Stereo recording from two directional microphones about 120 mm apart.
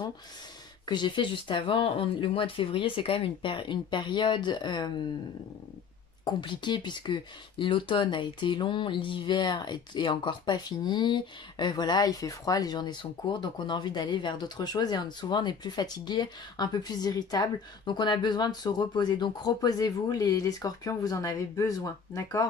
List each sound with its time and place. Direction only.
0.8 s speech: 40° left (ahead or behind)
6.2 s speech: 40° left (ahead or behind)